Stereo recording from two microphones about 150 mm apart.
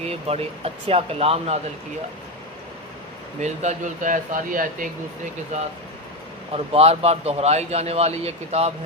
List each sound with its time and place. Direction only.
0.0 s speech: 45° right (ahead or behind)
3.4 s speech: 50° right (ahead or behind)
5.5 s speech: 50° right (ahead or behind)
6.7 s speech: 45° right (ahead or behind)